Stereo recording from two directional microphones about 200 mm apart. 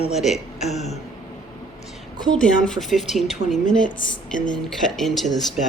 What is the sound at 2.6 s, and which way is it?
A woman's voice, centre (ahead or behind).